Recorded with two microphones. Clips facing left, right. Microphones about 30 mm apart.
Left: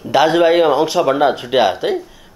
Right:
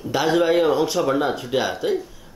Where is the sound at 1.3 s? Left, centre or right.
Left.